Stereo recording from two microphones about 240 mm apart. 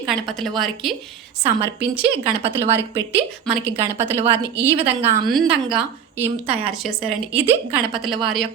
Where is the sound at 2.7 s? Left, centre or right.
Centre.